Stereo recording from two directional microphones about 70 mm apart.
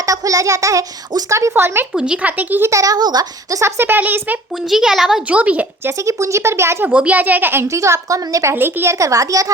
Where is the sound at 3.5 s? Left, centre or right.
Right.